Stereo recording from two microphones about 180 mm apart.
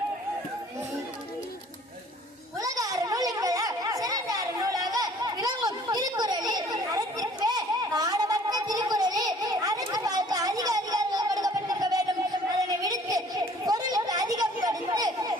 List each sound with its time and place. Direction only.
2.6 s children playing: 20° right (ahead or behind)